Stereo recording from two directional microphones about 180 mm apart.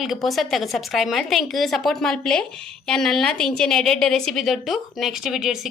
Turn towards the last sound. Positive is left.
turn(degrees=0)  # may be behind; listen again after turning